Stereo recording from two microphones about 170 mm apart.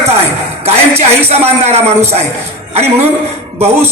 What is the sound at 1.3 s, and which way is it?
Speech, 35° right (ahead or behind).